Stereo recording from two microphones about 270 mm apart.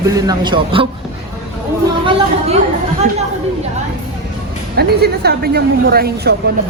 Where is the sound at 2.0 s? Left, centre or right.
Centre.